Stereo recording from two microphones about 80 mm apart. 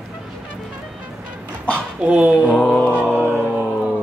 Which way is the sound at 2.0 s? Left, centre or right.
Centre.